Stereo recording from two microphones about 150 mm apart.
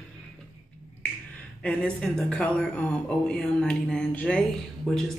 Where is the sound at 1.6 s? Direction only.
5° left (ahead or behind).